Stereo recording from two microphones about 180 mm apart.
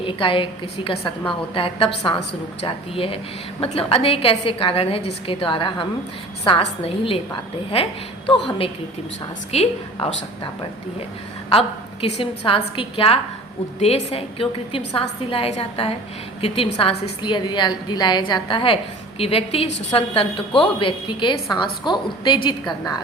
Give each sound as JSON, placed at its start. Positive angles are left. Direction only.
{"t": 0.0, "sound": "a woman's voice", "side_deg": 30}
{"t": 1.5, "sound": "a woman's voice", "side_deg": 30}
{"t": 8.4, "sound": "a woman's voice", "side_deg": 30}
{"t": 11.4, "sound": "a woman's voice", "side_deg": 30}